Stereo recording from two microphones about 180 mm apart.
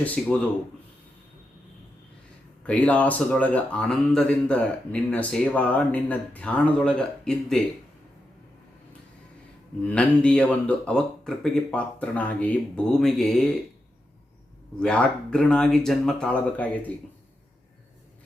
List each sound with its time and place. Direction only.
0.0 s speech: 10° left (ahead or behind)
2.6 s speech: 10° left (ahead or behind)
9.8 s speech: 5° left (ahead or behind)
14.8 s speech: 5° left (ahead or behind)